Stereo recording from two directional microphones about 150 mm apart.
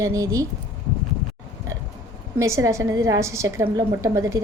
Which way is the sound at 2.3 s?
20° right (ahead or behind).